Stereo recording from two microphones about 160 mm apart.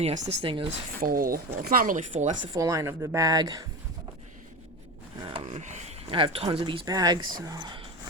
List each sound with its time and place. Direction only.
0.0 s speech: 40° right (ahead or behind)
1.0 s speech: 60° right (ahead or behind)
2.5 s a woman's voice: 20° right (ahead or behind)
5.2 s a sound: 30° right (ahead or behind)
5.5 s speech: 45° right (ahead or behind); by 7.8 s 25° right (ahead or behind)